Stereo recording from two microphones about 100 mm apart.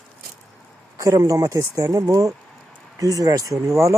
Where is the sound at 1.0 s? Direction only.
35° right (ahead or behind).